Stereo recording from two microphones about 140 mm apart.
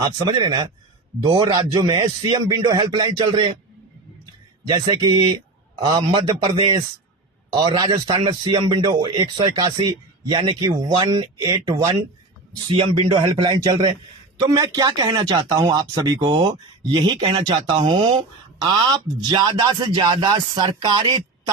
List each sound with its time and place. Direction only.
0.2 s speech: 30° right (ahead or behind)
4.7 s speech: 30° right (ahead or behind)
12.6 s speech: 40° right (ahead or behind)
13.1 s speech: 30° right (ahead or behind)